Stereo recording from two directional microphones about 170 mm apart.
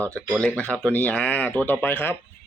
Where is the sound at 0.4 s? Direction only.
10° left (ahead or behind).